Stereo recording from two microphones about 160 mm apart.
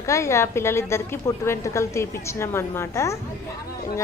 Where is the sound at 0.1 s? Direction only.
20° left (ahead or behind).